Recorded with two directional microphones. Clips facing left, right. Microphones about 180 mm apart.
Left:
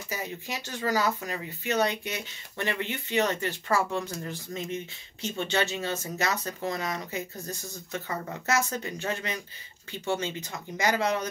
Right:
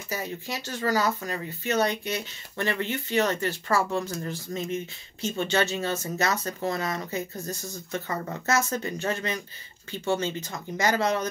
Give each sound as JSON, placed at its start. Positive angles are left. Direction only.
{"t": 0.1, "sound": "speech", "side_deg": 15}